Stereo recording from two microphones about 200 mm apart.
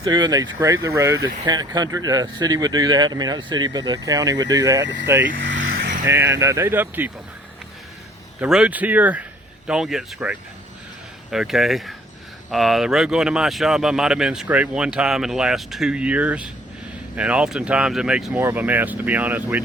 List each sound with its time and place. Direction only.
0.0 s speech: 20° right (ahead or behind)
5.4 s vehicle: 70° right (ahead or behind)
5.7 s vehicle: 45° right (ahead or behind)
6.1 s speech: 15° right (ahead or behind)
8.4 s speech: 5° right (ahead or behind)